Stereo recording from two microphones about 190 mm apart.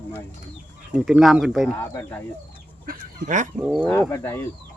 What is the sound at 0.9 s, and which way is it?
Speech, 5° right (ahead or behind).